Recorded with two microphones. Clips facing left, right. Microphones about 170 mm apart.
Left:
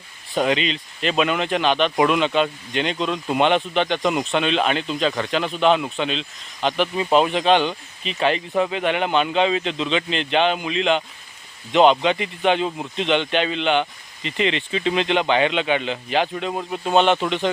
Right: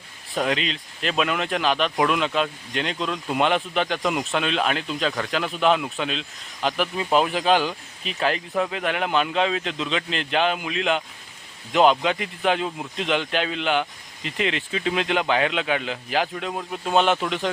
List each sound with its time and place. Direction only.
0.3 s speech: centre (ahead or behind)